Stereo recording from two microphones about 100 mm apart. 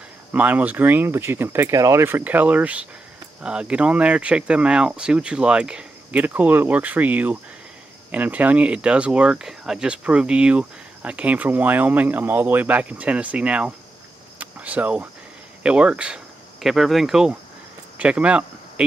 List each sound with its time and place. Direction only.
0.3 s speech: 15° right (ahead or behind); by 2.0 s 30° right (ahead or behind)
2.0 s speech: 20° right (ahead or behind)
14.4 s cricket: 15° right (ahead or behind)
15.6 s speech: 10° right (ahead or behind)